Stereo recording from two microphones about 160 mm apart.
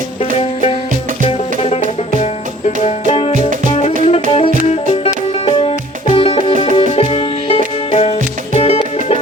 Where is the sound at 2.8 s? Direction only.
40° left (ahead or behind).